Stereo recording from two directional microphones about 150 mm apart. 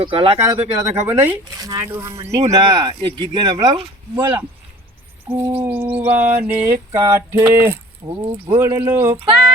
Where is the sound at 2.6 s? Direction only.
30° right (ahead or behind).